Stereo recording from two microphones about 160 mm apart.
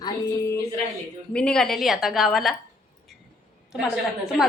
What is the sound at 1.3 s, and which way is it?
A woman's voice, 5° left (ahead or behind).